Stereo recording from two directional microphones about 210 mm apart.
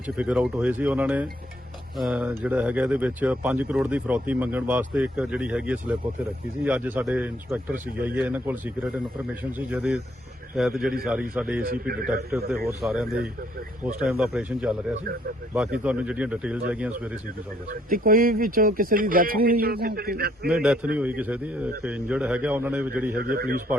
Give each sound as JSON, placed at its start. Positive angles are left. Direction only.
{"t": 0.2, "sound": "speech", "side_deg": -5}
{"t": 11.6, "sound": "speech", "side_deg": -45}
{"t": 12.3, "sound": "speech", "side_deg": -10}
{"t": 17.7, "sound": "speech", "side_deg": -40}
{"t": 20.5, "sound": "speech", "side_deg": -5}
{"t": 23.1, "sound": "speech", "side_deg": -45}